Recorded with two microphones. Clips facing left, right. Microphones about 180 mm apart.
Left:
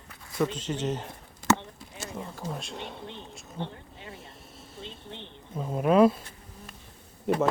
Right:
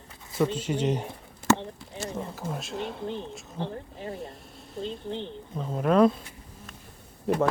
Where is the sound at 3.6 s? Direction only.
35° right (ahead or behind).